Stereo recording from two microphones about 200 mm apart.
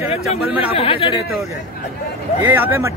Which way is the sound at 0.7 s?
30° left (ahead or behind).